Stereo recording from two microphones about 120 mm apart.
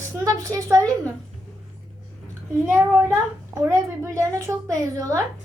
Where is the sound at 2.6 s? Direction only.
20° right (ahead or behind).